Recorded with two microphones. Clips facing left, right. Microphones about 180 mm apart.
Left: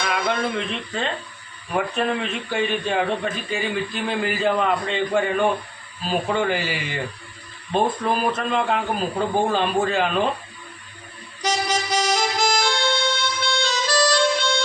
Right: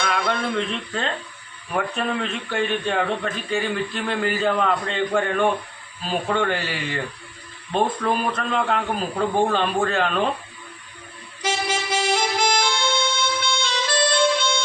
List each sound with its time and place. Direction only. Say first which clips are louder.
0.0 s a man's voice: even; 5° left (ahead or behind)
11.4 s harmonica: left 1 dB; 40° left (ahead or behind)